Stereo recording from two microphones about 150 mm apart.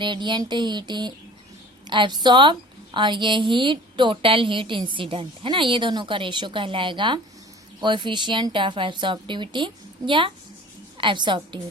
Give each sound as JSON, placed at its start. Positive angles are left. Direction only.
{"t": 0.0, "sound": "a woman's voice", "side_deg": -30}